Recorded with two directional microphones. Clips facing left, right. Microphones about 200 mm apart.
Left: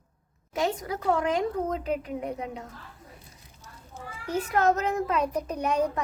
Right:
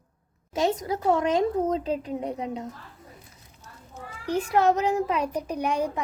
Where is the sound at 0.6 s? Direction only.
20° right (ahead or behind).